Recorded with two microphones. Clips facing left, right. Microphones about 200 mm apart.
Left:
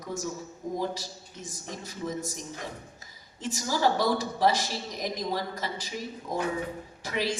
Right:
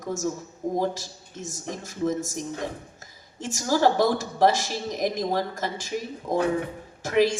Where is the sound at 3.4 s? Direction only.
45° right (ahead or behind).